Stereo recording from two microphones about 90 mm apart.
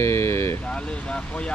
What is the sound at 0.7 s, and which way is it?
Speech, 10° left (ahead or behind).